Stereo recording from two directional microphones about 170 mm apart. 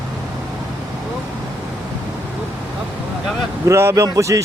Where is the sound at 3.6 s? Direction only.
15° right (ahead or behind).